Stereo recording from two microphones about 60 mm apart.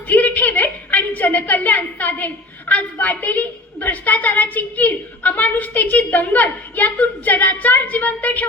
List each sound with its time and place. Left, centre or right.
0.1 s a woman's voice: left